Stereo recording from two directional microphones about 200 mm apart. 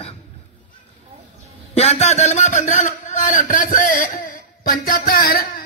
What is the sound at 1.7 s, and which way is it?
A man's voice, 30° left (ahead or behind).